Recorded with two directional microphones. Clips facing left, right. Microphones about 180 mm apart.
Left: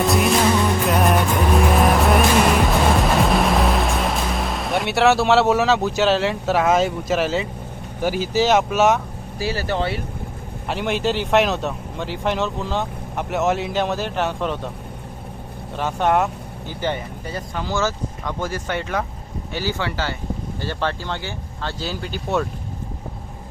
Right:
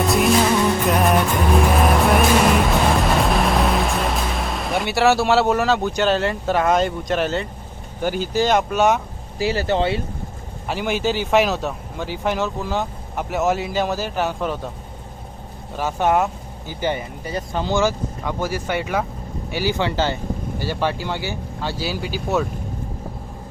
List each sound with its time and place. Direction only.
0.0 s music: centre (ahead or behind)
8.0 s speech: 5° left (ahead or behind)
9.4 s speech: 20° right (ahead or behind)
10.7 s speech: centre (ahead or behind)
15.8 s speech: 5° right (ahead or behind)
17.5 s speech: 25° right (ahead or behind)
20.6 s speech: 10° right (ahead or behind)